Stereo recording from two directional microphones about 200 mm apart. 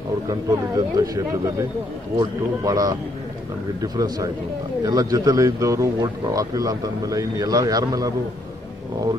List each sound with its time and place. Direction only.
0.3 s a man's voice: 20° right (ahead or behind)